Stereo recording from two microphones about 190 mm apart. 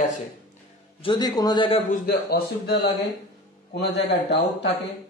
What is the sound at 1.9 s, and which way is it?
A man's voice, 55° left (ahead or behind).